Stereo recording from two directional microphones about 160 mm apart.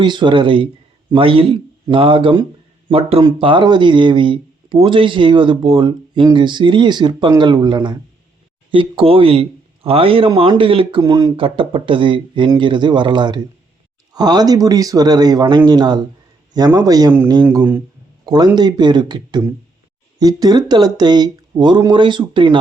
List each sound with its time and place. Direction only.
0.0 s a man's voice: 30° right (ahead or behind)